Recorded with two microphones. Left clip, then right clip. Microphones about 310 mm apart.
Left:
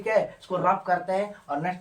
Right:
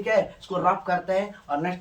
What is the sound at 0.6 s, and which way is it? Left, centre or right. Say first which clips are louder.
Speech: even; centre.